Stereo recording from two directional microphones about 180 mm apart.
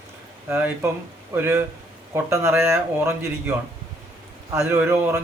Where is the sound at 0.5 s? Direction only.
15° right (ahead or behind).